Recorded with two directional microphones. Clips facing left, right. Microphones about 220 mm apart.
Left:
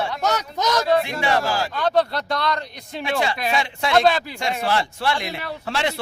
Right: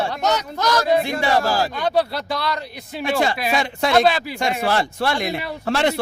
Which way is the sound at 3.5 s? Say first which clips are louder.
Right 3 dB; 45° right (ahead or behind).